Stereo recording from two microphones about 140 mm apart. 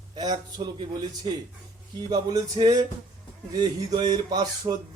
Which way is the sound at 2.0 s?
30° right (ahead or behind).